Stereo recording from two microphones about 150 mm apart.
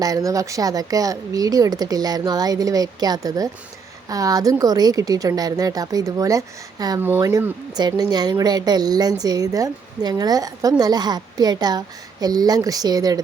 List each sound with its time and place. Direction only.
0.0 s speech: 25° right (ahead or behind)